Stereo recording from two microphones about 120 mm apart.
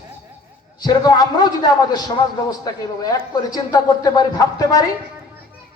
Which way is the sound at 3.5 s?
30° left (ahead or behind).